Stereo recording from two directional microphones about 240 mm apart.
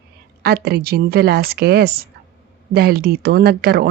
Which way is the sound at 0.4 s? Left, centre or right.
Right.